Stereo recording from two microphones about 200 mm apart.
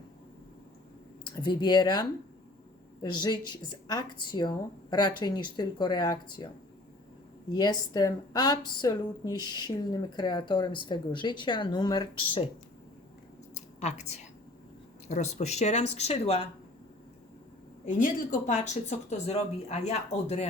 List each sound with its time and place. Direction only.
1.2 s a woman's voice: 20° left (ahead or behind)
7.5 s a woman's voice: 20° left (ahead or behind)
13.7 s speech: 35° left (ahead or behind)
17.8 s speech: 40° left (ahead or behind)